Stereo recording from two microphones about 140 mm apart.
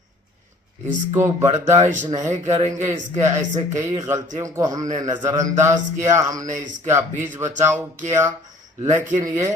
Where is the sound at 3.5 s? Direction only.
60° right (ahead or behind).